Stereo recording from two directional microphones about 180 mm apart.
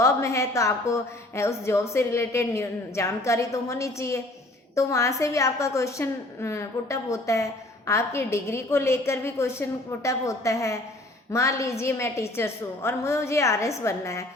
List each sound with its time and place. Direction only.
0.0 s a woman's voice: 15° left (ahead or behind)